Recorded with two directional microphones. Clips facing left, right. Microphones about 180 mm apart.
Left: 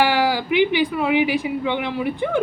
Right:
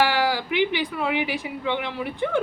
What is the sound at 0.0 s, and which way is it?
Speech, 15° left (ahead or behind).